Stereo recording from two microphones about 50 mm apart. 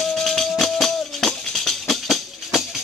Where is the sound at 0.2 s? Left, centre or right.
Centre.